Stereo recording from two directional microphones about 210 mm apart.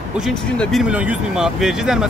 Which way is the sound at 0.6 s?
Centre (ahead or behind).